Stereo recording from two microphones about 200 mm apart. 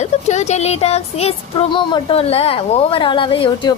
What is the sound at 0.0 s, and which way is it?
Speech, 35° left (ahead or behind).